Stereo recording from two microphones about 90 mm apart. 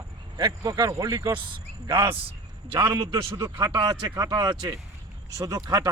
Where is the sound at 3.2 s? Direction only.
55° right (ahead or behind).